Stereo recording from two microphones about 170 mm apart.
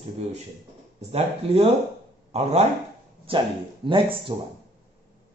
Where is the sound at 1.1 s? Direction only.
35° right (ahead or behind).